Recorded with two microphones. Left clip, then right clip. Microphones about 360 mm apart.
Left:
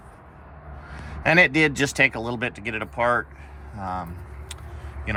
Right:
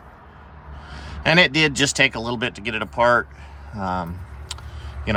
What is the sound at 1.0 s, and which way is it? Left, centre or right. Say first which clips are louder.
Speech: right 1 dB; centre.